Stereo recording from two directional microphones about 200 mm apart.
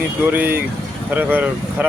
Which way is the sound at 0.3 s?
10° right (ahead or behind).